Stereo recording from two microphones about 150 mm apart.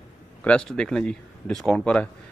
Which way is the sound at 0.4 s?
5° left (ahead or behind).